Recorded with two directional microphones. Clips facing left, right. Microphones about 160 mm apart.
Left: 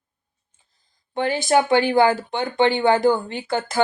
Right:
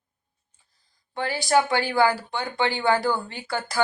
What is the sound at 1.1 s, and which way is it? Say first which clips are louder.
A woman's voice: left 3 dB; 20° left (ahead or behind).